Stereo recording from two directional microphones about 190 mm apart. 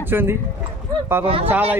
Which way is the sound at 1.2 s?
30° right (ahead or behind).